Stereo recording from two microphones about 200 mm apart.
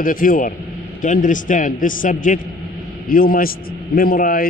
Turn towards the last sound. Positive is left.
turn(degrees=45)  # may be behind; listen again after turning